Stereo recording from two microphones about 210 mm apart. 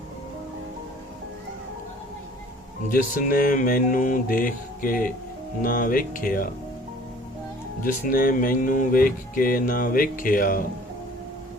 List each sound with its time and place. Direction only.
2.9 s speech: 40° left (ahead or behind)
7.9 s speech: 40° left (ahead or behind)